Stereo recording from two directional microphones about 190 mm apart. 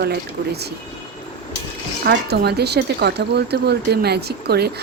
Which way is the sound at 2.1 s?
60° right (ahead or behind).